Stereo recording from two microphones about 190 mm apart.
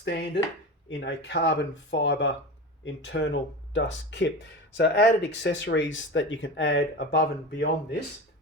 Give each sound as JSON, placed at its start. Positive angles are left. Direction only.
{"t": 0.0, "sound": "chopping", "side_deg": 60}
{"t": 0.9, "sound": "speech", "side_deg": 65}